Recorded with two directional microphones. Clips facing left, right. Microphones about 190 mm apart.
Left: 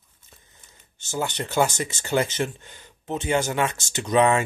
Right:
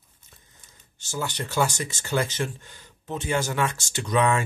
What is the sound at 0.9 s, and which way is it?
Speech, 20° left (ahead or behind).